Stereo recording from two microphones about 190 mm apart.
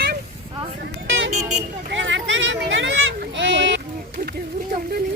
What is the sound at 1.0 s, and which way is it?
Vehicle, 80° right.